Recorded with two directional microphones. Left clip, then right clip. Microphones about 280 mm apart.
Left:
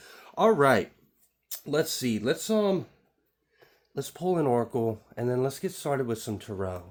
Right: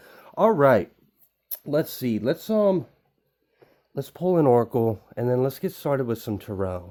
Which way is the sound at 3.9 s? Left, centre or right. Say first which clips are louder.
Right 5 dB; right.